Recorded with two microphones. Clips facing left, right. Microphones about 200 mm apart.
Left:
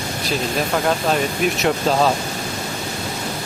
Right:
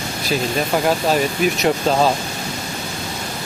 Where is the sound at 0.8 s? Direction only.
Centre (ahead or behind).